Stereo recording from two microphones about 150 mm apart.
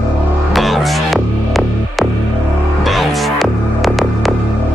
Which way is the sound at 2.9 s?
Centre (ahead or behind).